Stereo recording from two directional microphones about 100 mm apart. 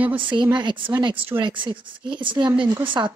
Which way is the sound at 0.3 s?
50° right (ahead or behind).